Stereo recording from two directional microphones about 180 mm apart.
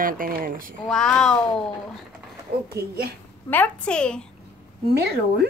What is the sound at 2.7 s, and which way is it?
Speech, 60° right (ahead or behind).